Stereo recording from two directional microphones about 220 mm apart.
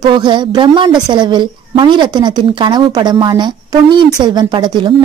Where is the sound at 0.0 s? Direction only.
20° right (ahead or behind).